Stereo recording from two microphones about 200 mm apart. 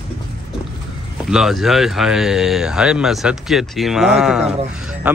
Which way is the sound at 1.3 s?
Centre (ahead or behind).